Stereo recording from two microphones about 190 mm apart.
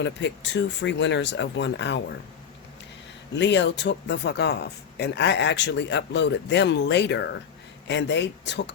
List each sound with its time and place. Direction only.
0.0 s speech: 65° left (ahead or behind)
3.3 s speech: 65° left (ahead or behind)